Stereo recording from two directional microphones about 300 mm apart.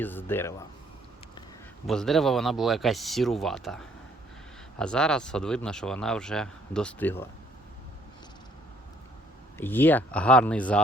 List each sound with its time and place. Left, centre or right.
0.0 s speech: centre
1.9 s speech: centre
9.6 s speech: centre